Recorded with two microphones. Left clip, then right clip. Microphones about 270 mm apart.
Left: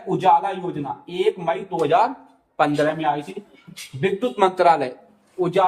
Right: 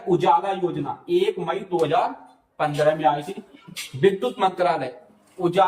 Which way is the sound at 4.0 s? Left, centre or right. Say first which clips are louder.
Even; centre.